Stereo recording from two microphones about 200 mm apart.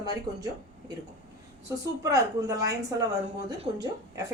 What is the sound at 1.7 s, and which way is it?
Speech, 15° right (ahead or behind).